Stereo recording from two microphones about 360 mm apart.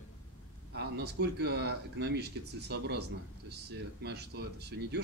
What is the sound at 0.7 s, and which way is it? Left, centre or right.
Speech, right.